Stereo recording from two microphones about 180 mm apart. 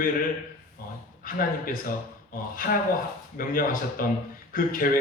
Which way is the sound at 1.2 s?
50° left (ahead or behind).